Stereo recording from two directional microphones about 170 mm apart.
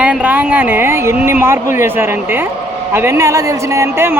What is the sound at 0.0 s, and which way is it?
Speech, 5° right (ahead or behind).